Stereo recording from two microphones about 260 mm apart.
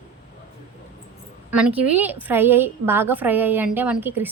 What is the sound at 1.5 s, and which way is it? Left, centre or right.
A woman's voice, centre.